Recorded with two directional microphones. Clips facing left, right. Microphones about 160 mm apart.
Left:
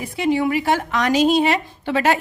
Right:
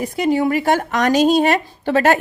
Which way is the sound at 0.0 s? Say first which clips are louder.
Right 2 dB; 45° right (ahead or behind).